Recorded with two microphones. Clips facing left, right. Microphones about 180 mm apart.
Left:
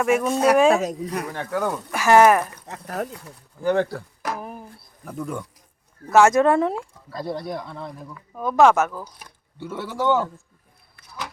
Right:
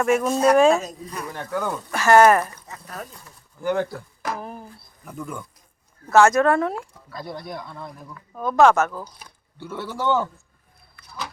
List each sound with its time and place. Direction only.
0.0 s speech: 5° left (ahead or behind)
0.7 s speech: 80° left
1.5 s speech: 10° left (ahead or behind)
2.6 s speech: 75° left (ahead or behind)
3.6 s speech: 35° left (ahead or behind)
4.4 s a sound: 5° left (ahead or behind)
5.0 s speech: 35° left (ahead or behind)
6.1 s speech: 5° left (ahead or behind)
6.3 s speech: 25° left (ahead or behind)
8.0 s speech: 5° left (ahead or behind)
9.6 s speech: 20° left (ahead or behind)